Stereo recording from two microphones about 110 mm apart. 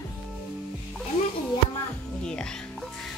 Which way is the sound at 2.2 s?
5° left (ahead or behind).